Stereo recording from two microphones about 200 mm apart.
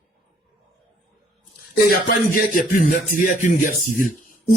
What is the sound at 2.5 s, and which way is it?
Speech, 45° left (ahead or behind).